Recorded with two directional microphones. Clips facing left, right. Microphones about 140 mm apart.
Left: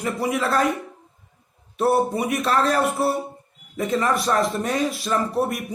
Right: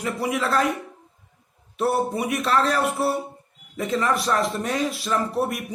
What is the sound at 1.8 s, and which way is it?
Speech, 45° left (ahead or behind).